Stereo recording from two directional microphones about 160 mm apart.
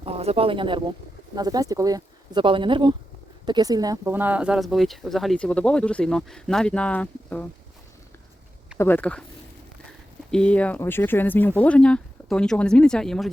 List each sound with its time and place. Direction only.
0.0 s speech: 40° right (ahead or behind); by 7.4 s 10° left (ahead or behind)
8.8 s speech: 10° left (ahead or behind)
10.3 s speech: 5° left (ahead or behind)